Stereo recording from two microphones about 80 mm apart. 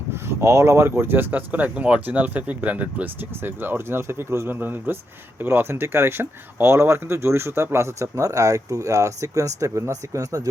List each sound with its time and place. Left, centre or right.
0.1 s speech: right